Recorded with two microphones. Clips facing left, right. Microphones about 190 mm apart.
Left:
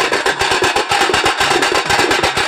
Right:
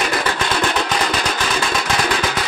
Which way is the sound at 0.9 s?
90° left.